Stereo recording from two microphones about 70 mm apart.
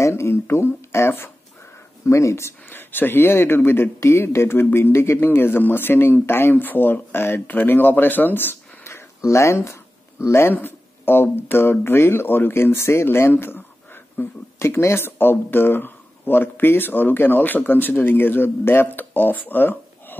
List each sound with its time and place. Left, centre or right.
0.0 s speech: left
2.7 s speech: left